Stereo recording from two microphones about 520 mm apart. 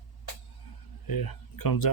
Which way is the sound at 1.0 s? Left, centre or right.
Left.